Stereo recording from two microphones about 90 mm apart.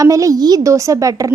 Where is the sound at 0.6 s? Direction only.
35° right (ahead or behind).